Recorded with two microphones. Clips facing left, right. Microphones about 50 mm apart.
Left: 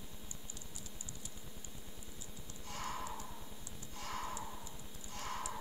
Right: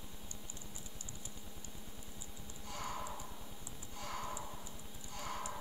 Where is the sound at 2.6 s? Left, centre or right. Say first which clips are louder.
Even; centre.